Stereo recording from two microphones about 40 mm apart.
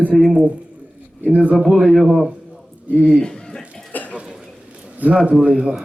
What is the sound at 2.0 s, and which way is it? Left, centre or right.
Speech, centre.